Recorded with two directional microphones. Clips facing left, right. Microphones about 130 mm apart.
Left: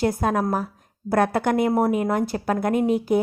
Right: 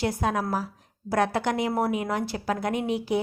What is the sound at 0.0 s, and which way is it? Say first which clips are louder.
A woman's voice: left 5 dB; 50° left (ahead or behind).